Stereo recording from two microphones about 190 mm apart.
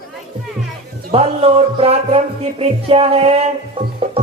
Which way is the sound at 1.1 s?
30° right (ahead or behind).